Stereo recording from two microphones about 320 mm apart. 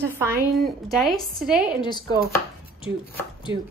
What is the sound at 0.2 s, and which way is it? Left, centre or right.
A woman's voice, centre.